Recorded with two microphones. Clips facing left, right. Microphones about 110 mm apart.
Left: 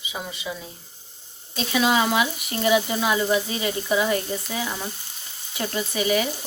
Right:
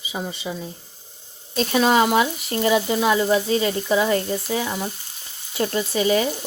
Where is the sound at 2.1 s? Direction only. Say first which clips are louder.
Right 4 dB; 30° right (ahead or behind).